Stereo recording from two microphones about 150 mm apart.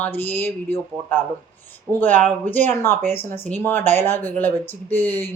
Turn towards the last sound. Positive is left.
turn(degrees=15)  # may be behind; listen again after turning